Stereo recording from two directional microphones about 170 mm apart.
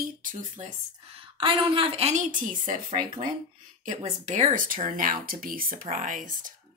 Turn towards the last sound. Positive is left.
turn(degrees=-50)  # may be behind; listen again after turning